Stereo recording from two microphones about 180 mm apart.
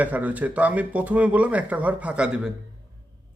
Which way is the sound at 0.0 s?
10° right (ahead or behind).